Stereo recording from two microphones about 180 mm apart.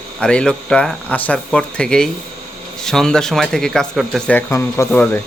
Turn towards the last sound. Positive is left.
turn(degrees=10)  # may be behind; listen again after turning